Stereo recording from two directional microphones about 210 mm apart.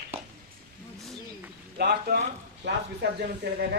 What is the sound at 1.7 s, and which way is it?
Speech, 50° right (ahead or behind).